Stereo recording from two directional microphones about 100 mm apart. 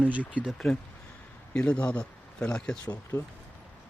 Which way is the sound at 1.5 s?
10° left (ahead or behind).